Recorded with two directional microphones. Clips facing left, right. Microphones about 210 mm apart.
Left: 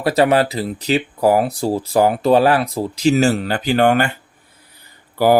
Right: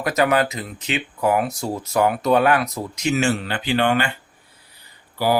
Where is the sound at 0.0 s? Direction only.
30° left (ahead or behind).